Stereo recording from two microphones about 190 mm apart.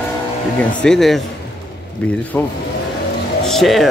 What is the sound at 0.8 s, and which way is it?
Speech, centre (ahead or behind).